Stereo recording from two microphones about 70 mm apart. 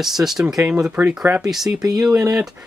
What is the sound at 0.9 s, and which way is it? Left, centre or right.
Speech, right.